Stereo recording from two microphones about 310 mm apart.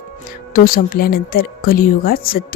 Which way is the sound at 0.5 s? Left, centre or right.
Left.